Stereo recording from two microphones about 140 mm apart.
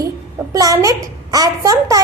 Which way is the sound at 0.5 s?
25° right (ahead or behind).